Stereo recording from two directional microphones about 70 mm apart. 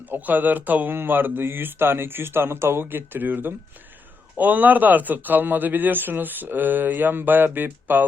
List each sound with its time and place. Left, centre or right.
0.1 s a man's voice: right